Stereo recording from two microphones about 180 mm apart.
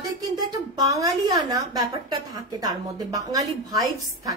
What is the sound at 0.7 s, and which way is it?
A woman's voice, 20° right (ahead or behind).